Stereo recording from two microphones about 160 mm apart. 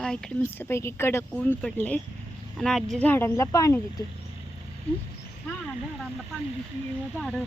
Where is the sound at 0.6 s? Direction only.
15° left (ahead or behind).